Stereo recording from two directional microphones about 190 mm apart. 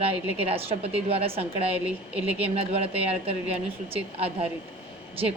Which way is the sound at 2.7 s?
30° right (ahead or behind).